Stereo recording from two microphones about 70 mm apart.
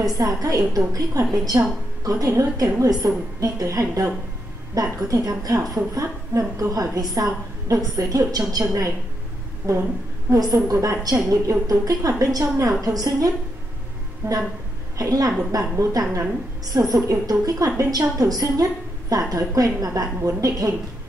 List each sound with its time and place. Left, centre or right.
0.4 s a woman's voice: right
5.8 s a woman's voice: right
14.2 s a woman's voice: right
15.0 s a woman's voice: right